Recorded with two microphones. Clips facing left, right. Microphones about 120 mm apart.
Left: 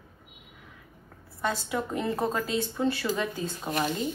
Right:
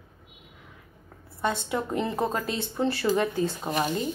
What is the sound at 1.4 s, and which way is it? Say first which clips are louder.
A woman's voice: right 2 dB; 25° right (ahead or behind).